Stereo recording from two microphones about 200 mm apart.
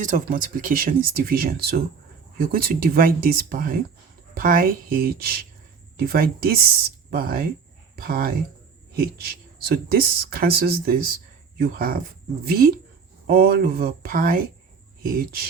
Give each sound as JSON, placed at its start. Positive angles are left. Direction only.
{"t": 0.0, "sound": "speech", "side_deg": -40}
{"t": 13.2, "sound": "speech", "side_deg": -50}